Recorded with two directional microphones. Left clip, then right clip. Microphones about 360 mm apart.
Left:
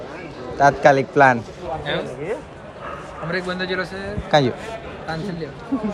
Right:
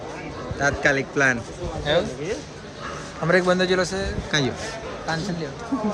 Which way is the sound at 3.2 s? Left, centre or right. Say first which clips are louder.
Right 6 dB; right.